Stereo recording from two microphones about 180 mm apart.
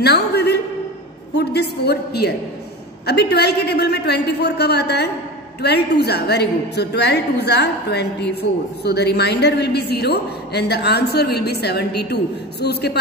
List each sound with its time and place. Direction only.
0.0 s a woman's voice: 65° left (ahead or behind)